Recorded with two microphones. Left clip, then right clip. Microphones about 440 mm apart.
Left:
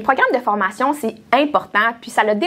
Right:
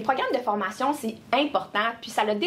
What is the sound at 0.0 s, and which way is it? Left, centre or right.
A woman's voice, left.